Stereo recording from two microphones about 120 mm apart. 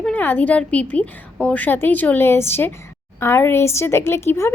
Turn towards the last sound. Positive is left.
turn(degrees=20)  # may be behind; listen again after turning